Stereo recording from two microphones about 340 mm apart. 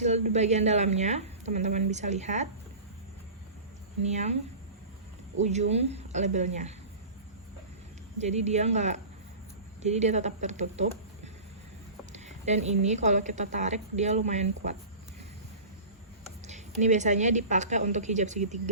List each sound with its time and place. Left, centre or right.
0.0 s a woman's voice: centre
4.0 s a woman's voice: centre
5.4 s a woman's voice: centre
8.2 s a woman's voice: centre
12.1 s a sound: centre
12.8 s a woman's voice: centre
16.5 s a woman's voice: right